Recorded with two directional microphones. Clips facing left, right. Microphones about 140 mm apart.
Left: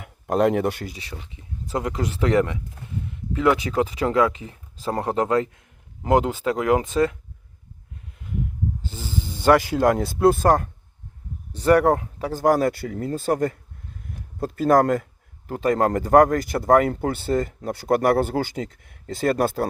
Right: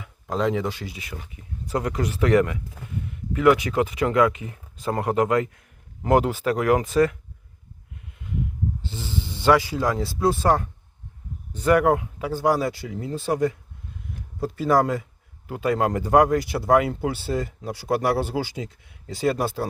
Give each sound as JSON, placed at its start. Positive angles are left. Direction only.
{"t": 0.0, "sound": "speech", "side_deg": 60}
{"t": 1.3, "sound": "speech", "side_deg": 25}
{"t": 6.0, "sound": "speech", "side_deg": 20}
{"t": 8.9, "sound": "speech", "side_deg": 45}
{"t": 11.5, "sound": "speech", "side_deg": 35}